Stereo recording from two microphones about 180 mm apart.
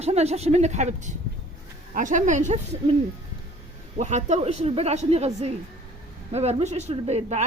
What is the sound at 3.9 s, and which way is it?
A woman's voice, 40° right (ahead or behind).